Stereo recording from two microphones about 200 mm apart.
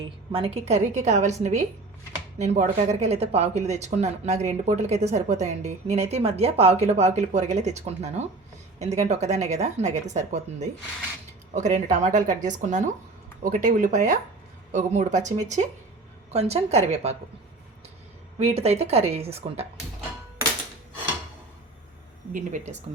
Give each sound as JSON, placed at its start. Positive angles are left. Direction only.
{"t": 0.0, "sound": "speech", "side_deg": -25}
{"t": 18.3, "sound": "speech", "side_deg": -30}
{"t": 22.3, "sound": "speech", "side_deg": -40}